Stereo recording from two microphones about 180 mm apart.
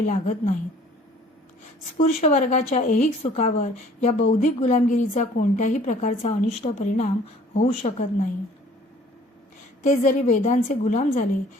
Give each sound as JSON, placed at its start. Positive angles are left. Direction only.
{"t": 0.0, "sound": "speech", "side_deg": 45}
{"t": 2.0, "sound": "speech", "side_deg": 40}
{"t": 9.8, "sound": "speech", "side_deg": 45}